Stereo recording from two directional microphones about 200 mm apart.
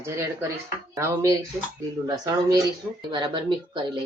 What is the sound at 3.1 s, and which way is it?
Speech, 25° right (ahead or behind).